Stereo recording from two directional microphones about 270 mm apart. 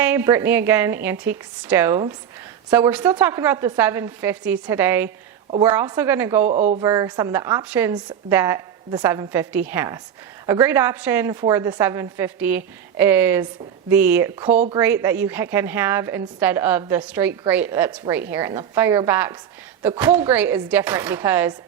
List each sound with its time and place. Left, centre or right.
0.0 s a woman's voice: centre
6.4 s speech: right
6.8 s a woman's voice: centre
14.8 s a woman's voice: centre